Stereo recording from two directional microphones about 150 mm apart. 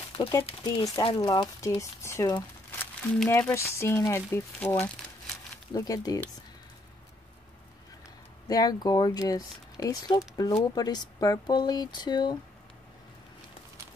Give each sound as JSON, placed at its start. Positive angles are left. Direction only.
{"t": 0.9, "sound": "speech", "side_deg": 25}
{"t": 5.8, "sound": "speech", "side_deg": 25}
{"t": 8.5, "sound": "speech", "side_deg": 25}